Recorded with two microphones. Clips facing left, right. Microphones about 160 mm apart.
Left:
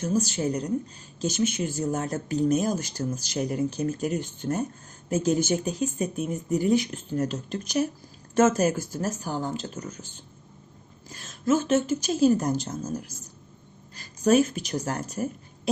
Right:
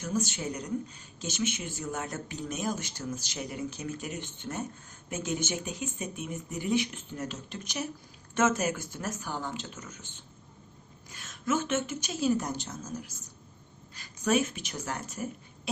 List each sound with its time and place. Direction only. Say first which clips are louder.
0.1 s speech: left 5 dB; 40° left (ahead or behind)
11.1 s speech: left 7 dB; 30° left (ahead or behind)